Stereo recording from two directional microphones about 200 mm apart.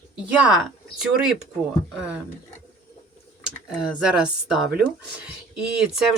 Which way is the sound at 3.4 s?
5° right (ahead or behind).